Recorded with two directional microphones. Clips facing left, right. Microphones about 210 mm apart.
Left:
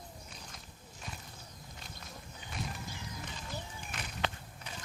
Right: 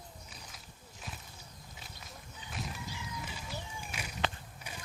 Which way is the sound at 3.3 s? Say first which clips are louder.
Even; 10° right (ahead or behind).